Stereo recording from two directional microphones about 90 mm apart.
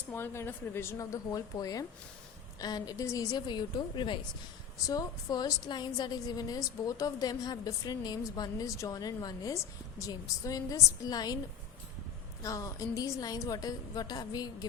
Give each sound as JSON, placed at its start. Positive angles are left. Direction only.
{"t": 0.1, "sound": "a woman's voice", "side_deg": 25}
{"t": 3.3, "sound": "a woman's voice", "side_deg": 55}
{"t": 4.9, "sound": "a woman's voice", "side_deg": 45}
{"t": 8.6, "sound": "a woman's voice", "side_deg": 35}
{"t": 12.4, "sound": "a woman's voice", "side_deg": 35}